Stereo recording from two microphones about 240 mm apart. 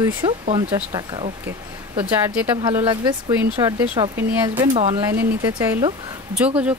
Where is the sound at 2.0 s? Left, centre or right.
Centre.